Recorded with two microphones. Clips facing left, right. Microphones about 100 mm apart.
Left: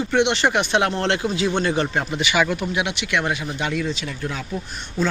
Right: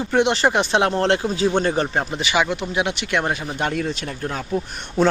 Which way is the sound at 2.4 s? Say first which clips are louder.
Left 1 dB; 20° right (ahead or behind).